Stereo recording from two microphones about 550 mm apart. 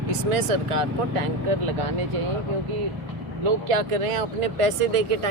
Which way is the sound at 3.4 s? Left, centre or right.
Right.